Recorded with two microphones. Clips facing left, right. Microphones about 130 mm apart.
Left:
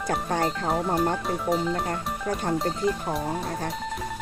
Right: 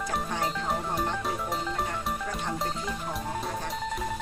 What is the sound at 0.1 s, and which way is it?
Speech, 50° left (ahead or behind).